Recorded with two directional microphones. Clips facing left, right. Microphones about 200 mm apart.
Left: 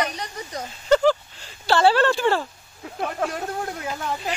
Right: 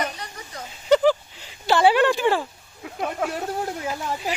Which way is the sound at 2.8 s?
5° right (ahead or behind).